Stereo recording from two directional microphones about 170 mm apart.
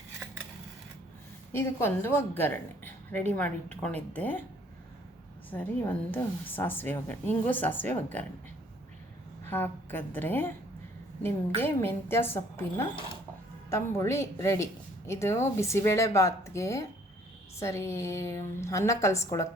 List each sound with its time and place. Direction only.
1.5 s a woman's voice: 15° left (ahead or behind)
5.5 s a woman's voice: 10° left (ahead or behind)
9.5 s a woman's voice: 10° left (ahead or behind)
11.6 s a woman's voice: 15° left (ahead or behind)